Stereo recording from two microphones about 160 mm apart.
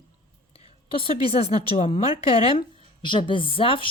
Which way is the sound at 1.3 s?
40° left (ahead or behind).